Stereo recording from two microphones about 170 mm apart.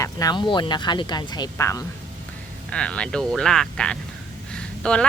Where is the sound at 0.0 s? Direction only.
20° left (ahead or behind).